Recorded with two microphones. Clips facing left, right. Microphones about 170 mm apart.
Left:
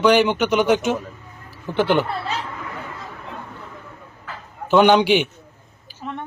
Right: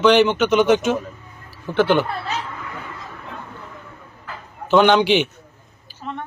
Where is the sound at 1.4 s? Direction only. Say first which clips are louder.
Right 2 dB; 15° left (ahead or behind).